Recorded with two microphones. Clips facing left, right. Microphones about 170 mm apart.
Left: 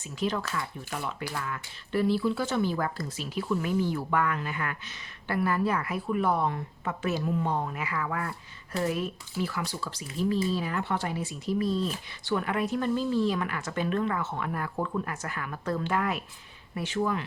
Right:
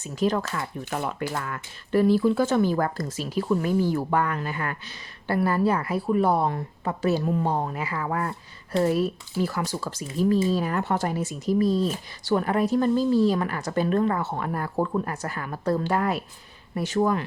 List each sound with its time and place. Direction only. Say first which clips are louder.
0.2 s speech: right 5 dB; 45° right (ahead or behind)